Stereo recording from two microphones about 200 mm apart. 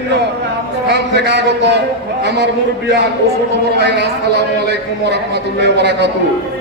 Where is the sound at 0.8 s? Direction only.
60° right (ahead or behind).